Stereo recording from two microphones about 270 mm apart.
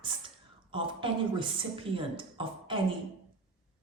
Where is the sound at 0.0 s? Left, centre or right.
Centre.